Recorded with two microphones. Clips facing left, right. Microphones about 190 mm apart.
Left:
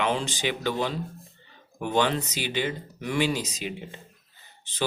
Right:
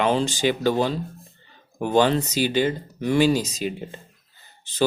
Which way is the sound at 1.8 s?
35° right (ahead or behind).